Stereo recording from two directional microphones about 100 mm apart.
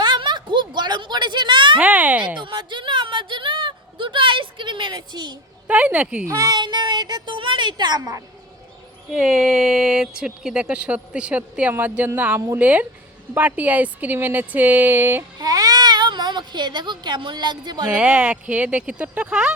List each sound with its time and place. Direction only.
0.0 s a sound: 50° right (ahead or behind)
1.8 s speech: 15° right (ahead or behind)
2.4 s speech: 55° right (ahead or behind)
5.6 s speech: 15° right (ahead or behind)
6.2 s a woman's voice: 40° right (ahead or behind)
9.1 s speech: 10° right (ahead or behind)
15.4 s speech: 40° right (ahead or behind)
17.8 s speech: 10° right (ahead or behind)